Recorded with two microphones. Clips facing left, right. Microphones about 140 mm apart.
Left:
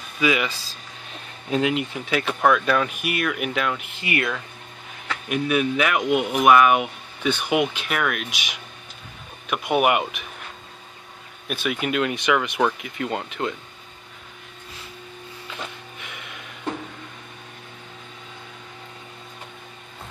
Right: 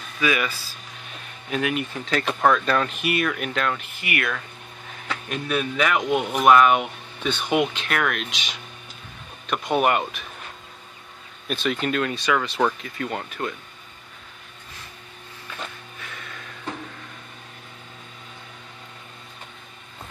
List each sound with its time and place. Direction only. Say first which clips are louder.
0.2 s speech: left 2 dB; 20° left (ahead or behind)
1.5 s speech: left 3 dB; 20° left (ahead or behind)
4.0 s speech: left 3 dB; 25° left (ahead or behind)
5.3 s speech: left 5 dB; 10° left (ahead or behind)
11.4 s speech: right 1 dB; 10° left (ahead or behind)
15.4 s music: even; 15° left (ahead or behind)